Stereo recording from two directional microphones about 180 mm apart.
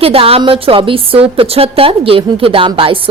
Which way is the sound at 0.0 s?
30° right (ahead or behind).